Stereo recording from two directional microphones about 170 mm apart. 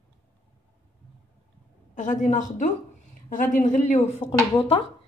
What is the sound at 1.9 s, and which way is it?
A woman's voice, 45° left (ahead or behind).